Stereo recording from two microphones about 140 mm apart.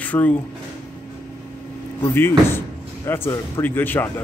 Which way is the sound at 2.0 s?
15° left (ahead or behind).